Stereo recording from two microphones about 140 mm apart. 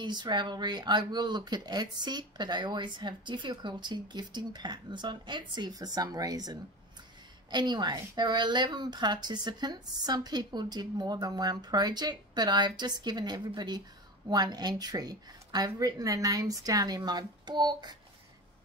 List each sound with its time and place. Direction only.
0.0 s speech: 30° right (ahead or behind)